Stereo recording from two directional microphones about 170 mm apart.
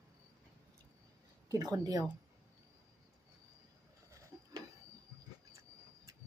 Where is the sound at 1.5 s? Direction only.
20° right (ahead or behind).